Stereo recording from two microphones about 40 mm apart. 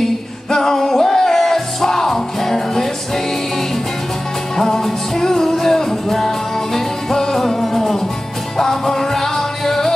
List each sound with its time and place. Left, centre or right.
0.0 s music: centre
4.6 s music: centre